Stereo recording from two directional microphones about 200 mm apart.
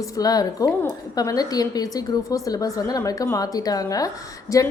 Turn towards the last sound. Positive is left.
turn(degrees=15)  # may be behind; listen again after turning